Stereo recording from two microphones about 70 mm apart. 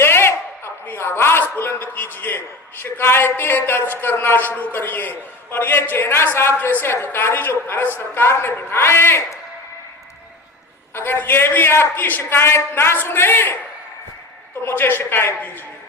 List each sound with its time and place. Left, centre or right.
0.0 s a sound: left
2.8 s a man's voice: left
10.9 s a man's voice: left
14.6 s a man's voice: left